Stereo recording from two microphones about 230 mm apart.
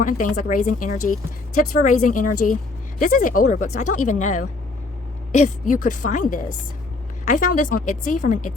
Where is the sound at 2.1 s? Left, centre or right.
Left.